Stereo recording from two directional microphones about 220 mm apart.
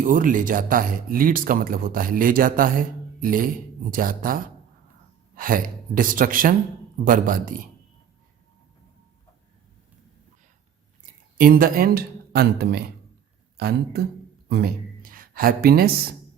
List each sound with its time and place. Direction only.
0.0 s speech: 40° right (ahead or behind)
11.3 s speech: 40° right (ahead or behind)